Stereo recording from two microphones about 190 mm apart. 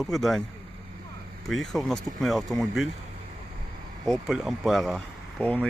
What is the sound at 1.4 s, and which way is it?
Speech, centre (ahead or behind).